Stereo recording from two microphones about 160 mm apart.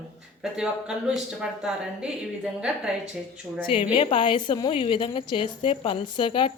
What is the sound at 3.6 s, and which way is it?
A woman's voice, 35° left (ahead or behind).